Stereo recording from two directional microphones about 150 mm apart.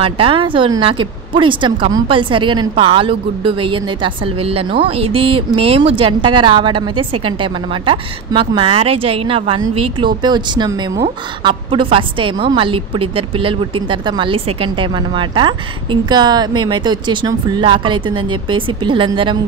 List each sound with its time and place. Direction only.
0.0 s a woman's voice: 35° right (ahead or behind)